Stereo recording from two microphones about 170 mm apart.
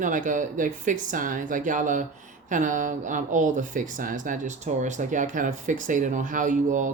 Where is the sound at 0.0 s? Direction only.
50° right (ahead or behind).